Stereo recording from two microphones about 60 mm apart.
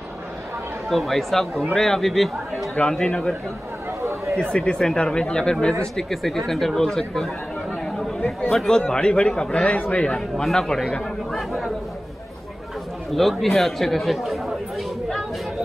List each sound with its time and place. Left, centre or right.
0.8 s speech: centre
2.9 s a man's voice: centre
4.0 s chatter: right
4.4 s a man's voice: centre
5.9 s speech: centre
8.5 s a man's voice: centre
10.3 s speech: centre
13.1 s speech: centre